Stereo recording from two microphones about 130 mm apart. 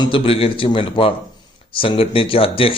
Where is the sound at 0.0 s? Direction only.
45° left (ahead or behind).